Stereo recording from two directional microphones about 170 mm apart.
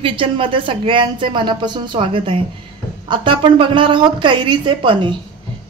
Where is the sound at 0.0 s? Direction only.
30° right (ahead or behind).